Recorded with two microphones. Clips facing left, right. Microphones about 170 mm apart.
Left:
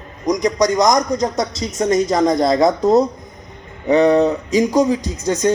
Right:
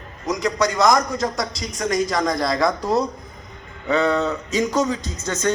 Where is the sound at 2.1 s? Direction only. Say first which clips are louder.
Left 7 dB; 20° left (ahead or behind).